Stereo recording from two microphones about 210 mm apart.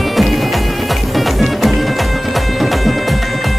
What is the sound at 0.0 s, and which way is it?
Music, centre (ahead or behind).